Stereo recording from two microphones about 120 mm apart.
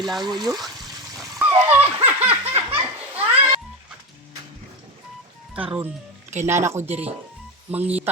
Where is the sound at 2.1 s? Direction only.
15° right (ahead or behind).